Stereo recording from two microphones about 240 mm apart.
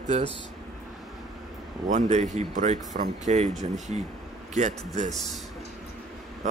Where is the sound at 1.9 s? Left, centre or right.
Right.